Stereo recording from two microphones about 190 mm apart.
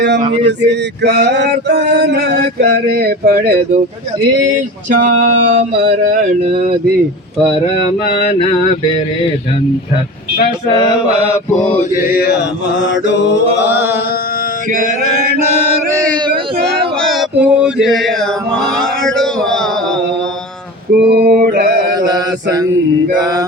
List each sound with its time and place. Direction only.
0.2 s mantra: 35° right (ahead or behind)
0.4 s male singing: 65° right (ahead or behind)
4.5 s male singing: 45° right (ahead or behind)
6.0 s mantra: 40° right (ahead or behind)
11.3 s mantra: 5° left (ahead or behind)
12.0 s mantra: 55° left (ahead or behind)
12.8 s mantra: 70° left (ahead or behind)
13.7 s carnatic music: 10° right (ahead or behind)
16.6 s male singing: centre (ahead or behind)
18.8 s a sound: 5° left (ahead or behind)
20.9 s mantra: 55° right (ahead or behind)
21.9 s mantra: 20° right (ahead or behind)
23.2 s mantra: 20° right (ahead or behind)